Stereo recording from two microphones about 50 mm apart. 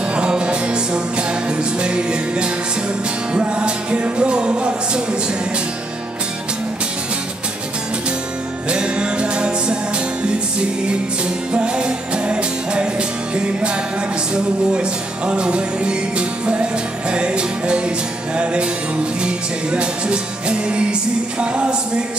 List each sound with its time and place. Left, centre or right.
0.1 s music: right
8.6 s music: right
11.5 s music: centre
14.3 s music: centre